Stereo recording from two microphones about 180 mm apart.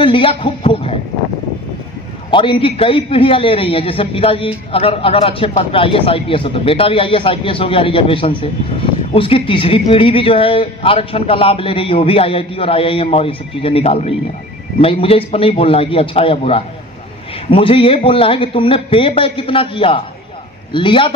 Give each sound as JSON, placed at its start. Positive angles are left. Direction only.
{"t": 0.0, "sound": "speech", "side_deg": 30}
{"t": 2.3, "sound": "a man's voice", "side_deg": 30}